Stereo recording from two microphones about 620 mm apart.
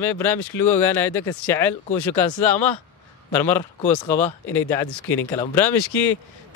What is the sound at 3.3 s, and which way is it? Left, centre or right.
Speech, centre.